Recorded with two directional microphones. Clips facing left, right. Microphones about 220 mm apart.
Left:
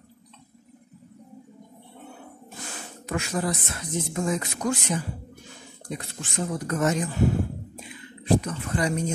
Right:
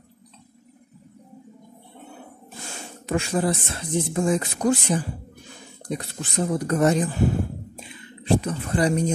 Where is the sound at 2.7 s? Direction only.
30° right (ahead or behind).